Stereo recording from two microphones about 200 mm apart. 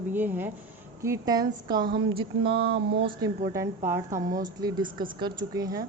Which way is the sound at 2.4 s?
55° right (ahead or behind).